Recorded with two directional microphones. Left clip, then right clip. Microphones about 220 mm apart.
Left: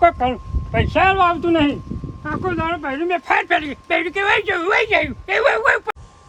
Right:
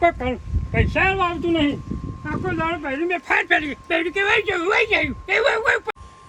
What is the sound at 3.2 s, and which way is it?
Speech, 30° left (ahead or behind).